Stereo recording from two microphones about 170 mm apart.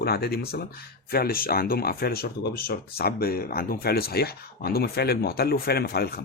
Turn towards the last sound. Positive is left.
turn(degrees=65)  # may be behind; listen again after turning